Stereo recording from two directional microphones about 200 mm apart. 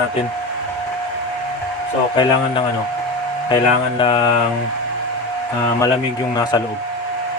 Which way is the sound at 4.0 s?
25° left (ahead or behind).